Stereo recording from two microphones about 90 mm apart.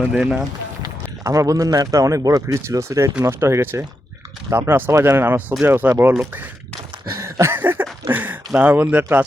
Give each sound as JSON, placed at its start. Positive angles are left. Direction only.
{"t": 0.1, "sound": "speech", "side_deg": -10}
{"t": 1.2, "sound": "a man's voice", "side_deg": -40}
{"t": 7.2, "sound": "a sound", "side_deg": -35}
{"t": 8.5, "sound": "speech", "side_deg": -20}